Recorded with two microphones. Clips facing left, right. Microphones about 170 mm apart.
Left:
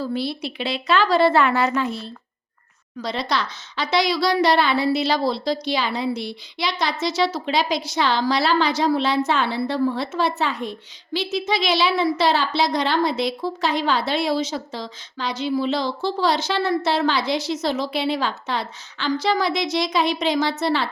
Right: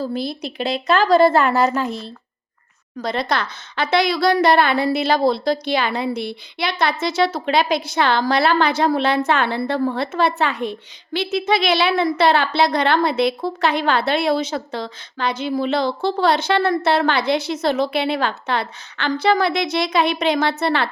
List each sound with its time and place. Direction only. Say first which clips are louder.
0.0 s a woman's voice: right 1 dB; 45° right (ahead or behind)
3.0 s a woman's voice: right 3 dB; 50° right (ahead or behind)